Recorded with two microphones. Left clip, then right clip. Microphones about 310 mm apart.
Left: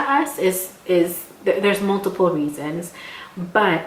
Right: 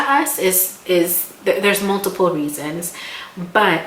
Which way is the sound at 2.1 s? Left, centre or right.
Left.